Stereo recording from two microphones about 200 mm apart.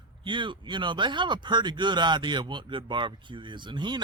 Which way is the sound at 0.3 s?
25° right (ahead or behind).